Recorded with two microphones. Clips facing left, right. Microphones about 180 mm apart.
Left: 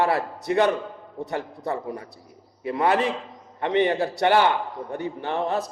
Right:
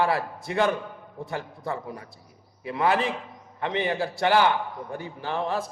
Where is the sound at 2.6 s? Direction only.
40° left (ahead or behind).